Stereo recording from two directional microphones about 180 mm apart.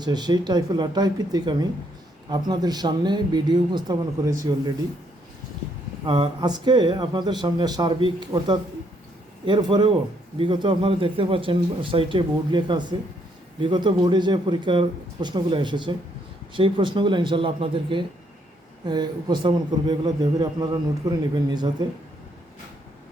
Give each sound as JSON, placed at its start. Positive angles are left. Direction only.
{"t": 0.0, "sound": "speech", "side_deg": -25}
{"t": 6.1, "sound": "speech", "side_deg": -25}